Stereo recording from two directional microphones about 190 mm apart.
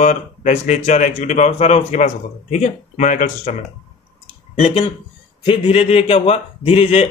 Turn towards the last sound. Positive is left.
turn(degrees=35)  # may be behind; listen again after turning